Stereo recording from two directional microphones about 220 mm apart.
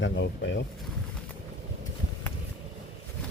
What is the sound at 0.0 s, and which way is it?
Speech, 55° left (ahead or behind).